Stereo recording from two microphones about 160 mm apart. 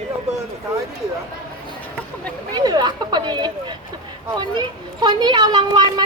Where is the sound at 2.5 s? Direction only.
25° right (ahead or behind).